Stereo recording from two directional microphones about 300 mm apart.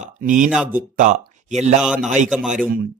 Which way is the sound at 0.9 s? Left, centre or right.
Right.